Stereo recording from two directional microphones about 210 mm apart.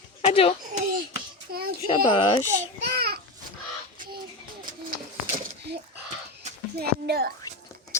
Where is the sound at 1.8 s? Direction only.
25° left (ahead or behind).